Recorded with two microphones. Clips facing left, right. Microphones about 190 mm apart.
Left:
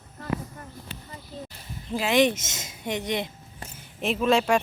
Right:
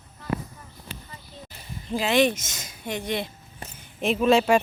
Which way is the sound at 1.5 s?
5° left (ahead or behind).